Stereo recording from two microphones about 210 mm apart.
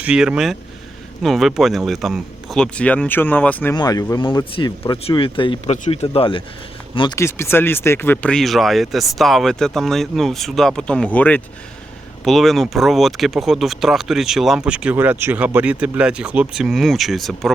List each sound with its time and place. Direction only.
0.0 s speech: 5° right (ahead or behind)
3.8 s speech: 20° left (ahead or behind)
7.3 s speech: 10° left (ahead or behind)